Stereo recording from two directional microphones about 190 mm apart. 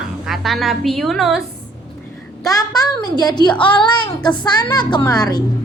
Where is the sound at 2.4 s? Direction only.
20° left (ahead or behind).